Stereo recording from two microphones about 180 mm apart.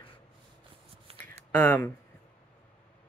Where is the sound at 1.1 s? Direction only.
35° right (ahead or behind).